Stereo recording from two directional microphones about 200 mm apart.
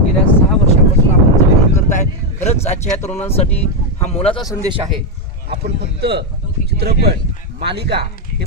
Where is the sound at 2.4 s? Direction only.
35° left (ahead or behind).